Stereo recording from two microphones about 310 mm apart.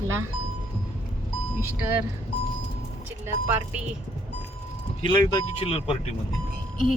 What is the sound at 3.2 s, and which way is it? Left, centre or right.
Speech, centre.